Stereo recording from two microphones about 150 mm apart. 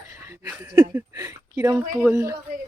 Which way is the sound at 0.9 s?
20° right (ahead or behind).